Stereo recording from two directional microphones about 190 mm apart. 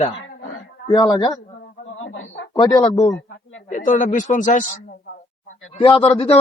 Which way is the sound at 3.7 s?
45° left (ahead or behind).